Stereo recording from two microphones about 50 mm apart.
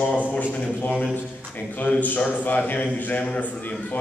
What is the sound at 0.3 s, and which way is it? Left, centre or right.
Speech, left.